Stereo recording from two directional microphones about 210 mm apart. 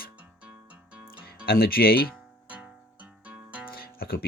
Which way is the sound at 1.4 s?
45° left (ahead or behind).